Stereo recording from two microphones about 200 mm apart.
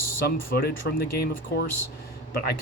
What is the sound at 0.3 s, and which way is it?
Speech, 50° left (ahead or behind).